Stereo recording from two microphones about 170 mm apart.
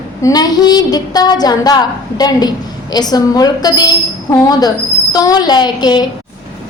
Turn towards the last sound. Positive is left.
turn(degrees=25)  # may be behind; listen again after turning